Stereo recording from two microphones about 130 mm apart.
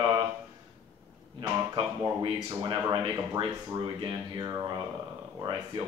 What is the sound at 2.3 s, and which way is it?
Speech, 35° right (ahead or behind).